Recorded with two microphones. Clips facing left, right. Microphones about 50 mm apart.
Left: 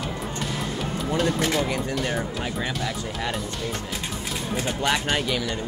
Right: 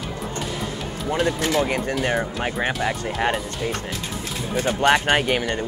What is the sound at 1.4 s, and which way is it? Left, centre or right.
Speech, right.